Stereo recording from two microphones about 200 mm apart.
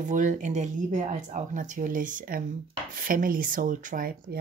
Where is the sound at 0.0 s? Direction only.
40° right (ahead or behind).